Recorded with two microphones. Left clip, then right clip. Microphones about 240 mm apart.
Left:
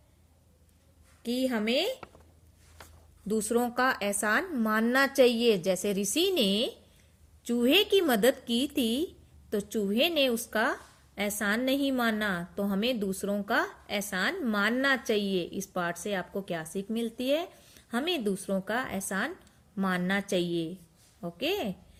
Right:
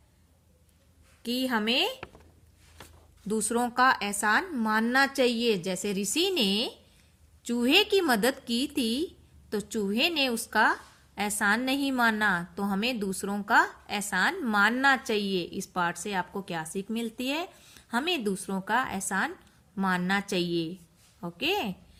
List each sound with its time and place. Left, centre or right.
1.2 s a woman's voice: right
3.2 s a woman's voice: right